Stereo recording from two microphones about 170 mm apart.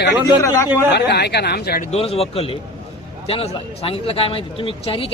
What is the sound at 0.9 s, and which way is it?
Speech, 75° left (ahead or behind).